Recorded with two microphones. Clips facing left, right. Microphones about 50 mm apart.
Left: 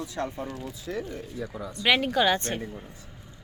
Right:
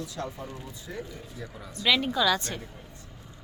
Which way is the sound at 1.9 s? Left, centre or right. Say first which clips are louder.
Left 2 dB; left.